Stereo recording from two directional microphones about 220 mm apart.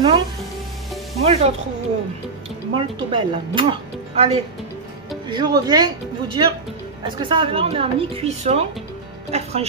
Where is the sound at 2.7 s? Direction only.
20° right (ahead or behind).